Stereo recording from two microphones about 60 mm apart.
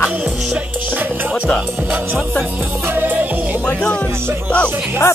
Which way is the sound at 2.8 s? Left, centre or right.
Right.